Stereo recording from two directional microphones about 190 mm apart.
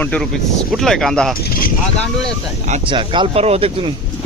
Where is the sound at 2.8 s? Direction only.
25° right (ahead or behind).